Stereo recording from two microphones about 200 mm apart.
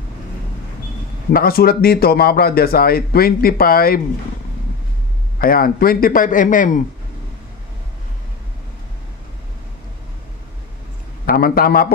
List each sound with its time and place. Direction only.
1.3 s speech: 50° left (ahead or behind)
5.4 s speech: 45° left (ahead or behind)
11.2 s speech: 50° left (ahead or behind)